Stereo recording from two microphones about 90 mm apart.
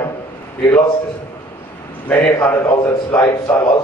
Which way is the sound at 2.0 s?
15° left (ahead or behind).